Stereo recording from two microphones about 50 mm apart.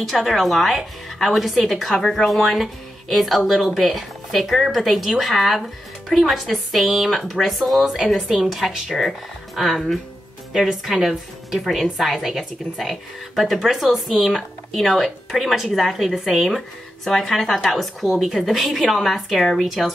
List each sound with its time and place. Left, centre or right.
0.1 s speech: centre